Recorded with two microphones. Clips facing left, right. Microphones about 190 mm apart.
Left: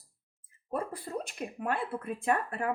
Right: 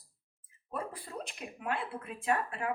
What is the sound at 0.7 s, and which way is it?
Speech, 45° left (ahead or behind).